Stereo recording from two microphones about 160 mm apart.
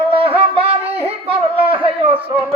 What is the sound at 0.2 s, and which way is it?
Music, 35° right (ahead or behind).